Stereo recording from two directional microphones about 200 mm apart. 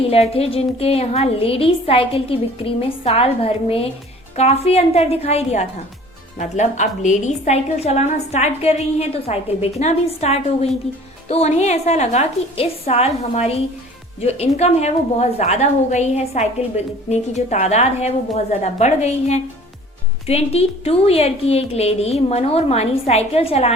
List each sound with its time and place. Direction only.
0.1 s a woman's voice: 30° left (ahead or behind)